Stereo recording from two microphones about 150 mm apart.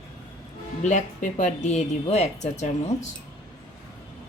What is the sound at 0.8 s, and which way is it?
Speech, 55° left (ahead or behind).